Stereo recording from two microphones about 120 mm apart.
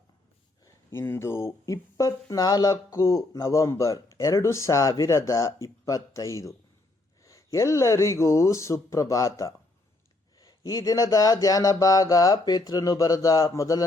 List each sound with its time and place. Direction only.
0.6 s speech: 20° left (ahead or behind)